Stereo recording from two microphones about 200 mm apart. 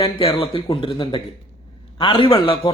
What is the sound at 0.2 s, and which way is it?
A man's voice, 25° left (ahead or behind).